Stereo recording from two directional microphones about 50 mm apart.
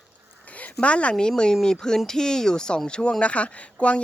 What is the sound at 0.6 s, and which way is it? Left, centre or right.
Speech, left.